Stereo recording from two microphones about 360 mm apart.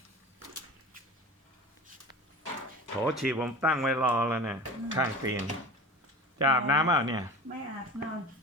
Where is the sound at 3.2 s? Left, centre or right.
Centre.